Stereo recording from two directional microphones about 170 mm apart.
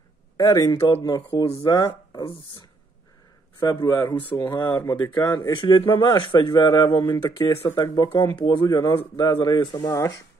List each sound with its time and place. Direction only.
0.4 s speech: 20° left (ahead or behind)
3.5 s speech: 20° left (ahead or behind)